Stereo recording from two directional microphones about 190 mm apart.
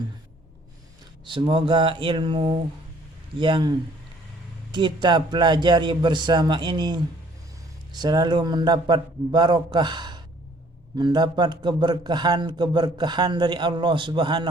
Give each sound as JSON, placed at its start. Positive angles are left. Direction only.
{"t": 1.3, "sound": "a man's voice", "side_deg": -25}